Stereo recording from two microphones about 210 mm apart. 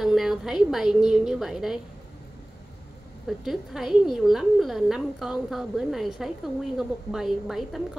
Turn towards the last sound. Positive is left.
turn(degrees=0)  # may be behind; listen again after turning